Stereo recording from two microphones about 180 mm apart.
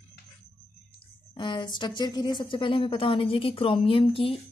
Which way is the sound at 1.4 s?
25° left (ahead or behind).